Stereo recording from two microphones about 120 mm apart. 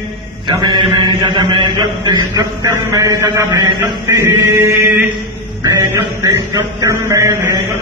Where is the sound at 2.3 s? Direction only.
25° right (ahead or behind).